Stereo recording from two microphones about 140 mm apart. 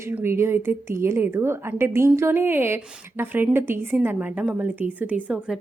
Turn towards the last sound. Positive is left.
turn(degrees=-10)  # may be behind; listen again after turning